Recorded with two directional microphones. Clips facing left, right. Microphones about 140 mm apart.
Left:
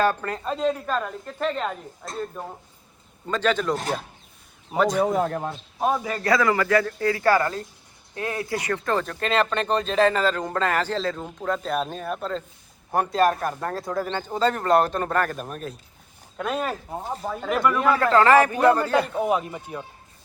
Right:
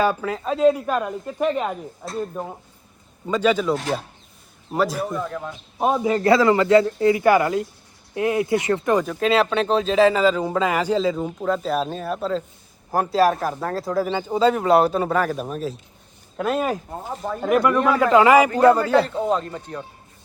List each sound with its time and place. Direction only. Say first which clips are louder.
0.0 s speech: right 2 dB; 5° right (ahead or behind)
3.2 s speech: right 4 dB; 10° right (ahead or behind)
5.0 s speech: left 5 dB; 90° left
5.3 s speech: left 2 dB; 40° left (ahead or behind)
5.8 s a man's voice: right 5 dB; 20° right (ahead or behind); by 17.4 s 5° left (ahead or behind)
17.4 s speech: right 5 dB; 10° right (ahead or behind)
17.7 s speech: right 2 dB; 5° left (ahead or behind)
18.0 s speech: right 3 dB; 10° right (ahead or behind)
18.8 s speech: right 3 dB; 15° left (ahead or behind)